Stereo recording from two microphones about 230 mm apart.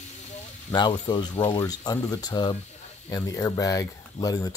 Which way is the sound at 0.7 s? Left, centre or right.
Centre.